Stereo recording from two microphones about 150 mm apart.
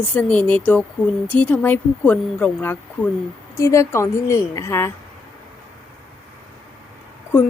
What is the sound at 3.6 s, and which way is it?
A woman's voice, 20° left (ahead or behind).